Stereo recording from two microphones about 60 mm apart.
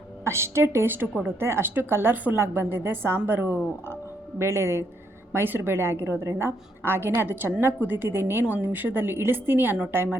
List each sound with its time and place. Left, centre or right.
0.3 s a woman's voice: right
4.4 s a woman's voice: right